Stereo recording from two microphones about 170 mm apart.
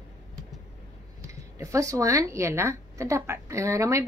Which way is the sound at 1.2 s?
20° right (ahead or behind).